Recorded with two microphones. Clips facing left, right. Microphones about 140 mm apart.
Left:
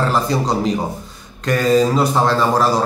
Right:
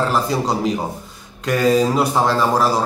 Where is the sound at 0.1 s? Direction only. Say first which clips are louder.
Left 1 dB; 5° right (ahead or behind).